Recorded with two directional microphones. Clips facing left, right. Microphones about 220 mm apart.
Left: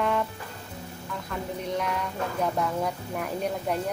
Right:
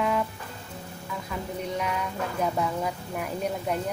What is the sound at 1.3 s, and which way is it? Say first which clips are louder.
A woman's voice: left 1 dB; centre (ahead or behind).